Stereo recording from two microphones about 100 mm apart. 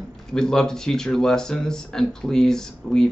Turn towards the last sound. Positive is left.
turn(degrees=5)  # may be behind; listen again after turning